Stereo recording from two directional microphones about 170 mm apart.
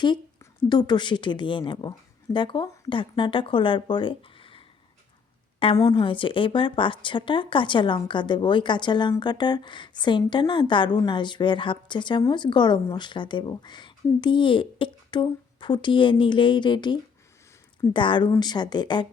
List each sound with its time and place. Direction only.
0.7 s speech: 25° left (ahead or behind)
5.7 s speech: 25° left (ahead or behind)